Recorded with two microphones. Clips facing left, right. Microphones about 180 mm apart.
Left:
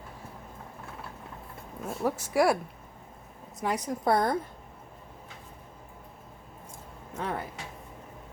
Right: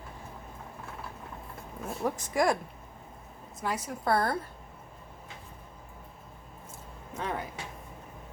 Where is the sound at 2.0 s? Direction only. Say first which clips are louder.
Left 3 dB; 10° left (ahead or behind).